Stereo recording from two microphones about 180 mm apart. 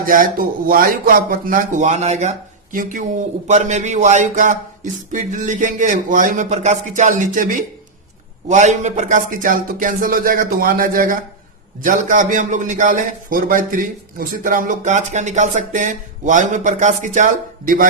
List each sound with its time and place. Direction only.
0.0 s a man's voice: 50° right (ahead or behind)